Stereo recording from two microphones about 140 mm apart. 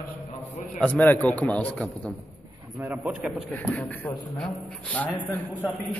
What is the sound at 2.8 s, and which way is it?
Speech, 10° right (ahead or behind).